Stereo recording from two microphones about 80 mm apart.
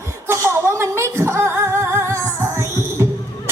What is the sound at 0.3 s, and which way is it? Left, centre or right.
Singing, right.